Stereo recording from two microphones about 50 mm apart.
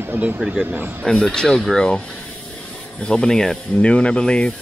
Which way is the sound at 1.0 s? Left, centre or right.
Centre.